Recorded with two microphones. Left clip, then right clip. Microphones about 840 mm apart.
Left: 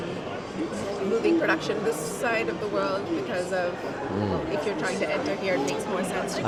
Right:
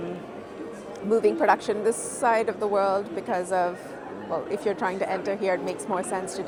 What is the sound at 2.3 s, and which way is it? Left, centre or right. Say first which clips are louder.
Speech: right 5 dB; right.